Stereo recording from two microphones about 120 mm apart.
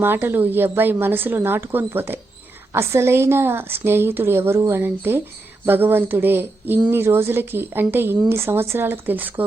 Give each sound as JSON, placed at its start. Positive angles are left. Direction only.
{"t": 0.0, "sound": "a woman's voice", "side_deg": -20}